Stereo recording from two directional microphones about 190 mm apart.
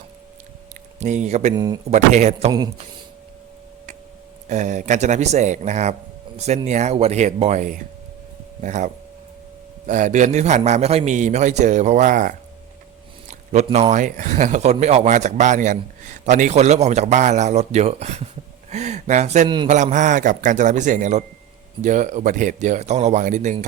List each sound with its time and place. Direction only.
0.9 s speech: 40° right (ahead or behind)
1.5 s speech: 20° right (ahead or behind)
1.9 s speech: 35° right (ahead or behind)
2.5 s speech: 20° right (ahead or behind)
4.4 s speech: 40° right (ahead or behind)
13.7 s speech: 35° right (ahead or behind)